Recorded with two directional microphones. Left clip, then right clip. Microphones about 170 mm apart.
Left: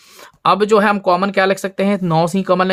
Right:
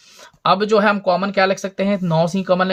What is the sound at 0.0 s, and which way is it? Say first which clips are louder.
Speech: left 3 dB; 45° left (ahead or behind).